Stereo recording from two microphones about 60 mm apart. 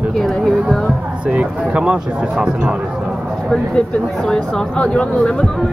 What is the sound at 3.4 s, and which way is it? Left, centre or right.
Speech, centre.